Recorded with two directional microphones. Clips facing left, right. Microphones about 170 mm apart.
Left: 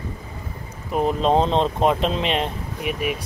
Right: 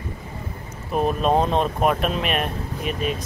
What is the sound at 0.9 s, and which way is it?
Speech, 20° left (ahead or behind).